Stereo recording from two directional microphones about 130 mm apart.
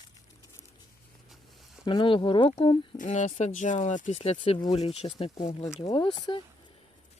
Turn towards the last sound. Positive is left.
turn(degrees=40)  # may be behind; listen again after turning